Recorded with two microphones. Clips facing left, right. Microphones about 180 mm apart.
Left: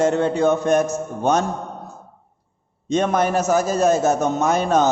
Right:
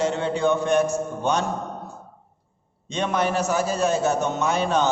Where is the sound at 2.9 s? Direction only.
45° left (ahead or behind).